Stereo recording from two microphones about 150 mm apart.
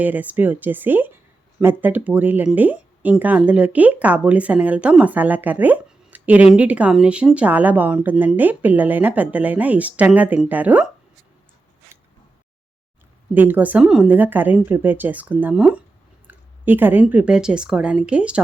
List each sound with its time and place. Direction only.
0.0 s speech: 10° right (ahead or behind)
13.3 s a woman's voice: 10° right (ahead or behind)